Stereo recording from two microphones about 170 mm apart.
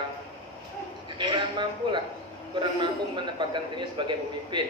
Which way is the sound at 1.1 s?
25° right (ahead or behind).